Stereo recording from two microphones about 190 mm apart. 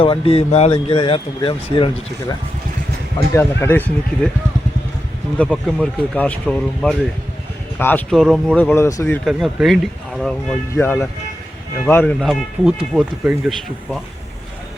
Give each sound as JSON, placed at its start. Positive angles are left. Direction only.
{"t": 0.0, "sound": "speech", "side_deg": 30}
{"t": 3.3, "sound": "speech", "side_deg": 10}
{"t": 5.4, "sound": "speech", "side_deg": 5}
{"t": 9.2, "sound": "speech", "side_deg": 0}
{"t": 12.2, "sound": "speech", "side_deg": 0}